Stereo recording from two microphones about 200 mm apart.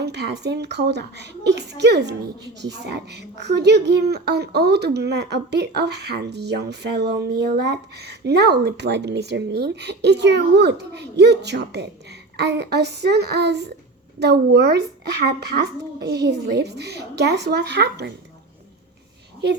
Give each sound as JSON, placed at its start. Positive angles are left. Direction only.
{"t": 0.0, "sound": "a woman's voice", "side_deg": -60}